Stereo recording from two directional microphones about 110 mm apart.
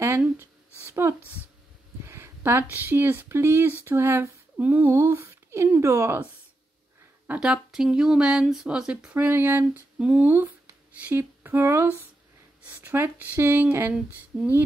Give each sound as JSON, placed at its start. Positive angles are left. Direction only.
{"t": 0.8, "sound": "a sound", "side_deg": -25}
{"t": 2.0, "sound": "speech", "side_deg": -25}
{"t": 7.2, "sound": "speech", "side_deg": -5}